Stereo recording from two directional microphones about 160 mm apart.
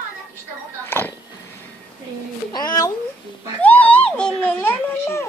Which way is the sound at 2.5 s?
25° left (ahead or behind).